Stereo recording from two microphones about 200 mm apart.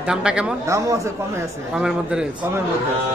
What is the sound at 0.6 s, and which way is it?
Speech, 15° right (ahead or behind).